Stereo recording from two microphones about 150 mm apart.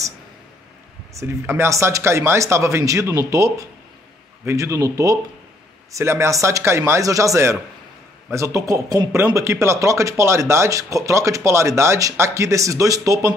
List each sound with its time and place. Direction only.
1.1 s speech: 15° right (ahead or behind)